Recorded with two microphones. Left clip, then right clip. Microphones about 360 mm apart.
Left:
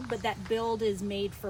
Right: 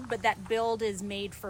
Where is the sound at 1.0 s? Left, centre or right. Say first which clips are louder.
Left 3 dB; centre.